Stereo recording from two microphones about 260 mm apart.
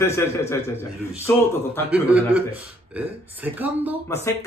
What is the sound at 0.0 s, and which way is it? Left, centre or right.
Speech, centre.